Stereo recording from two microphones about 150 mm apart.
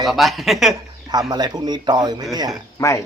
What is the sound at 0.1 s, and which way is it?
Speech, centre (ahead or behind).